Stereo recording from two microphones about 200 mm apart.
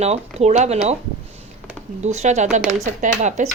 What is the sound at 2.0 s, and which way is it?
A woman's voice, 35° right (ahead or behind).